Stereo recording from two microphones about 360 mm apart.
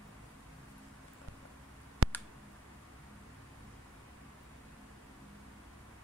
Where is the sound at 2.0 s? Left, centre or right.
Right.